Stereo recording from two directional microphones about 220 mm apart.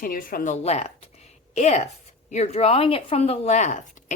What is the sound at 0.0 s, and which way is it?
Speech, 40° left (ahead or behind).